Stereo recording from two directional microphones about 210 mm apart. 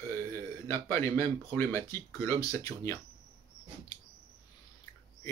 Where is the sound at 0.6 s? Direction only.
10° left (ahead or behind).